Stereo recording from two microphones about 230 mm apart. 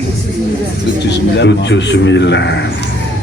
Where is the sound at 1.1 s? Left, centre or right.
Left.